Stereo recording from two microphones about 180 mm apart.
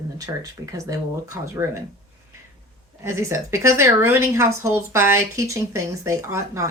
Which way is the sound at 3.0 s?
15° right (ahead or behind).